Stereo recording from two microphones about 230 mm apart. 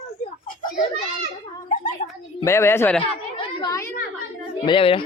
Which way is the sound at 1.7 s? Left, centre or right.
Left.